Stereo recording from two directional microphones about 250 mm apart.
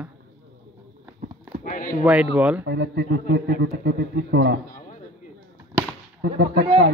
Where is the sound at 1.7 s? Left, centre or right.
Left.